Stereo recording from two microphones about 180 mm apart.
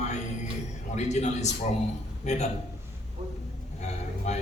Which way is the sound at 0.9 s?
40° left (ahead or behind).